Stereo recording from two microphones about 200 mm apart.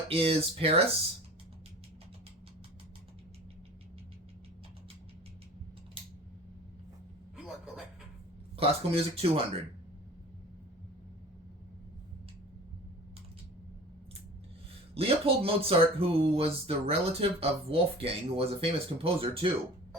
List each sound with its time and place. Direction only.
0.1 s speech: 30° right (ahead or behind)
7.3 s a sound: 5° right (ahead or behind)
8.5 s speech: 30° right (ahead or behind)
14.9 s speech: 30° right (ahead or behind)